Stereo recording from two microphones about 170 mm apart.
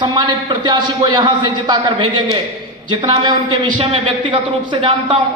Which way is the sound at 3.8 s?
30° right (ahead or behind).